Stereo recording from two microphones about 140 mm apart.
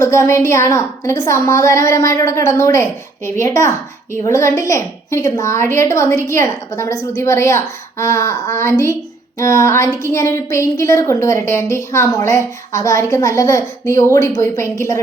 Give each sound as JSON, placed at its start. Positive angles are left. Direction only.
{"t": 0.0, "sound": "a woman's voice", "side_deg": 20}